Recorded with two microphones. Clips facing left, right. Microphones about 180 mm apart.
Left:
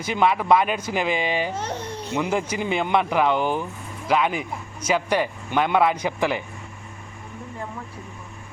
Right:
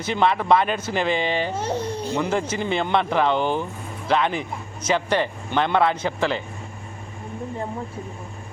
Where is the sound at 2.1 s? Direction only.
10° left (ahead or behind).